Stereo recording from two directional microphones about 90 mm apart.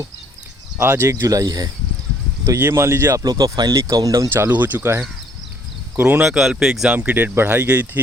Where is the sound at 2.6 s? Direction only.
30° right (ahead or behind).